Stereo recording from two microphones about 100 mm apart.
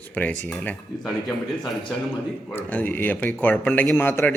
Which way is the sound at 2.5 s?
15° left (ahead or behind).